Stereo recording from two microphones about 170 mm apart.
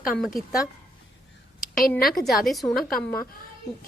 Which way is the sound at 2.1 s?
Centre (ahead or behind).